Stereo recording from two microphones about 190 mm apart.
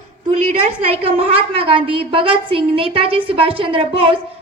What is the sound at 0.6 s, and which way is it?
A woman's voice, 30° right (ahead or behind).